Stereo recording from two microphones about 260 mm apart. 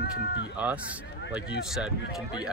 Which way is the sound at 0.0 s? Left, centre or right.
Left.